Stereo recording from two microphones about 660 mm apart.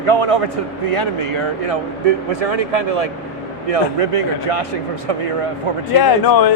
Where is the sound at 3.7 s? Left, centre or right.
Right.